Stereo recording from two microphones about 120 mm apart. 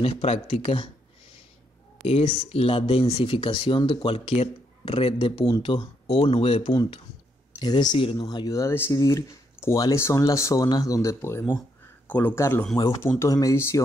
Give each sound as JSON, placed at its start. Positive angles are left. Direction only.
{"t": 0.0, "sound": "speech", "side_deg": 60}
{"t": 2.0, "sound": "speech", "side_deg": 55}
{"t": 7.5, "sound": "speech", "side_deg": 35}